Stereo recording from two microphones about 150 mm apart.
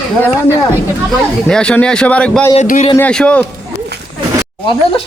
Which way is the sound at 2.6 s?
60° left (ahead or behind).